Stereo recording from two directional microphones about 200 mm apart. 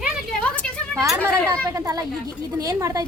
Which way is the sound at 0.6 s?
5° left (ahead or behind).